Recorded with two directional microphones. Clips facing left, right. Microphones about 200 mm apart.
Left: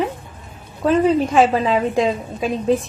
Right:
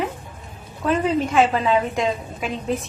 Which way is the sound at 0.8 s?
35° left (ahead or behind).